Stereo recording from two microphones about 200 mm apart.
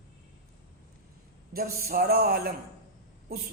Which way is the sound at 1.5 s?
50° right (ahead or behind).